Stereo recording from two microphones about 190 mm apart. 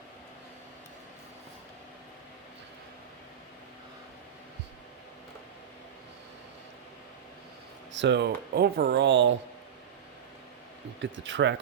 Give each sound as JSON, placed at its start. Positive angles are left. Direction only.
{"t": 7.9, "sound": "speech", "side_deg": -65}
{"t": 11.0, "sound": "speech", "side_deg": -75}